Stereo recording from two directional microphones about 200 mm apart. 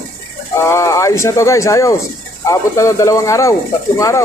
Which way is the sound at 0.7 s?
15° left (ahead or behind).